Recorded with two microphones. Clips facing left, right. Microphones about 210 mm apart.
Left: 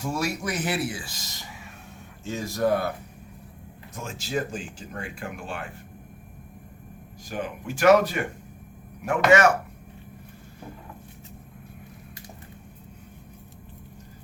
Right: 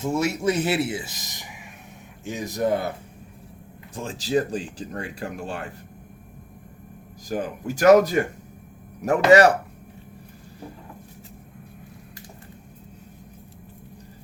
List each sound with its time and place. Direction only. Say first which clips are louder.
0.0 s speech: right 6 dB; 25° right (ahead or behind)
3.9 s speech: right 6 dB; 35° right (ahead or behind)
7.3 s speech: right 4 dB; 40° right (ahead or behind)